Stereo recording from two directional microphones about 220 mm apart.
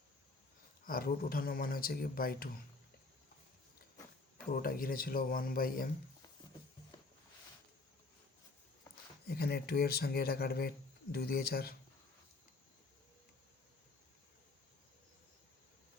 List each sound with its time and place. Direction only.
0.9 s speech: 40° left (ahead or behind)
4.4 s speech: 40° left (ahead or behind)
9.2 s speech: 45° left (ahead or behind)